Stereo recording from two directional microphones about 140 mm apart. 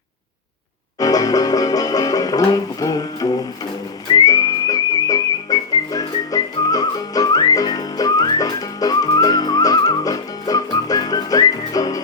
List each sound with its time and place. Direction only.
0.9 s music: 25° left (ahead or behind)
4.1 s whistling: 25° left (ahead or behind)